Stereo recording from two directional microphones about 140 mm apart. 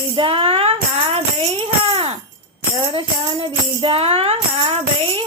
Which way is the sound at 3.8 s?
45° right (ahead or behind).